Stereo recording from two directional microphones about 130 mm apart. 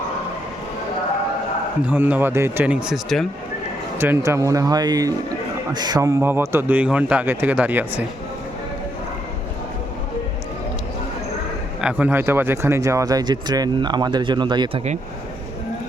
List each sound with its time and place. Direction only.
1.9 s speech: 10° right (ahead or behind)
2.8 s speech: centre (ahead or behind)
3.9 s speech: 15° right (ahead or behind)
11.8 s speech: 10° right (ahead or behind); by 14.8 s 35° right (ahead or behind)